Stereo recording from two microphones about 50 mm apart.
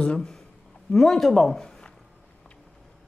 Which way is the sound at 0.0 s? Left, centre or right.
Centre.